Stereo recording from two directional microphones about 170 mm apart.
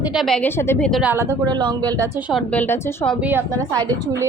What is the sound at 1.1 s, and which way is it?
Speech, 15° right (ahead or behind).